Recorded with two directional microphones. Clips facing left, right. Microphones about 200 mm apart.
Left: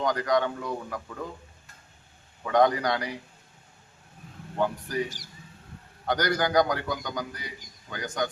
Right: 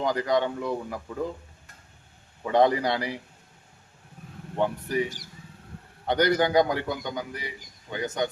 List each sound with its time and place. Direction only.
0.0 s a man's voice: 25° right (ahead or behind)
2.4 s a man's voice: 30° right (ahead or behind)
4.5 s a man's voice: 25° right (ahead or behind)
5.0 s speech: 55° right (ahead or behind)
6.1 s a man's voice: 25° right (ahead or behind)